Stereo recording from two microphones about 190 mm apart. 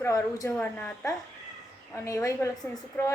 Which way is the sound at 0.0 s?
15° left (ahead or behind).